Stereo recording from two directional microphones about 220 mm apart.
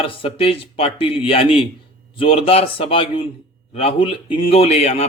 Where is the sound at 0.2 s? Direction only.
25° left (ahead or behind).